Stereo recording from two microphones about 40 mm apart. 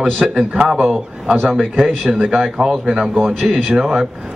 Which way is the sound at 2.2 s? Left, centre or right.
Centre.